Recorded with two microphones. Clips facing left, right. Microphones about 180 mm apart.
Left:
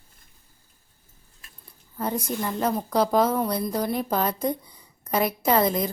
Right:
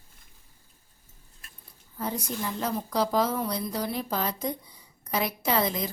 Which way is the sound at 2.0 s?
55° left (ahead or behind).